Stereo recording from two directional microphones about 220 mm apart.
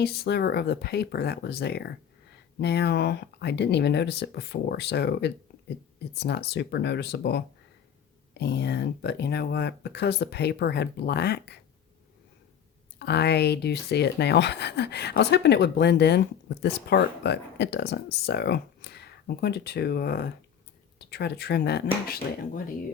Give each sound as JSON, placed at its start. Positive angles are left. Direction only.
{"t": 0.0, "sound": "speech", "side_deg": 45}
{"t": 13.0, "sound": "speech", "side_deg": 50}